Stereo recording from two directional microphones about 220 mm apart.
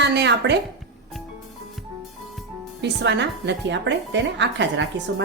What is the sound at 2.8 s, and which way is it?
A woman's voice, 50° right (ahead or behind).